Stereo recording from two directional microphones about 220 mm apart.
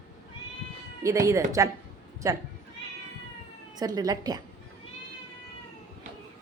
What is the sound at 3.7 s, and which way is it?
Speech, 15° right (ahead or behind).